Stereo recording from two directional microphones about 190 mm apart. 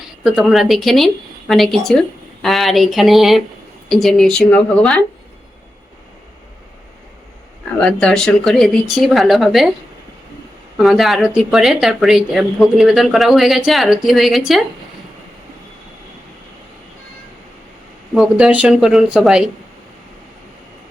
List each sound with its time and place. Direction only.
0.3 s speech: centre (ahead or behind)
7.8 s speech: 5° left (ahead or behind)
10.8 s speech: centre (ahead or behind)
18.1 s speech: 5° right (ahead or behind)